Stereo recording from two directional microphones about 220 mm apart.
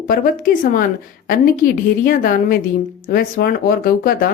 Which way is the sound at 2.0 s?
40° left (ahead or behind).